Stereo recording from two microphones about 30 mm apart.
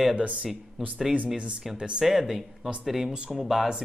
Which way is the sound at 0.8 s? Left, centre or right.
Centre.